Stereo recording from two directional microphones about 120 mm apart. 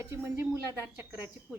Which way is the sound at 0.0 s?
20° right (ahead or behind).